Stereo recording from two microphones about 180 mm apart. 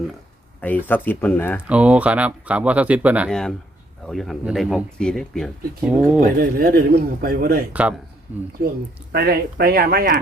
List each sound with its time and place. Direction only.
0.6 s speech: 10° left (ahead or behind)
1.6 s speech: 5° right (ahead or behind)
3.2 s speech: 5° left (ahead or behind)
6.1 s speech: 55° right (ahead or behind)
7.7 s speech: 5° right (ahead or behind)
9.1 s speech: 55° right (ahead or behind)